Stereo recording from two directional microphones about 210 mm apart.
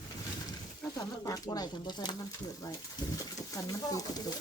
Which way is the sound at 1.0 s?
15° left (ahead or behind).